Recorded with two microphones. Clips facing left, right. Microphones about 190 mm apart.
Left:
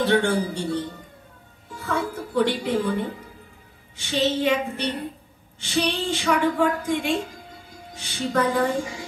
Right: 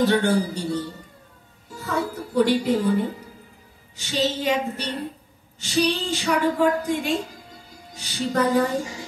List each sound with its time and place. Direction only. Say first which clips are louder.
0.0 s a woman's voice: right 1 dB; 40° right (ahead or behind)